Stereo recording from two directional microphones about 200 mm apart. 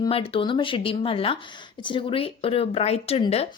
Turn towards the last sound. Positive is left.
turn(degrees=30)  # may be behind; listen again after turning